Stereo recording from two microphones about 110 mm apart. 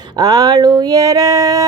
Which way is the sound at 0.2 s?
35° right (ahead or behind).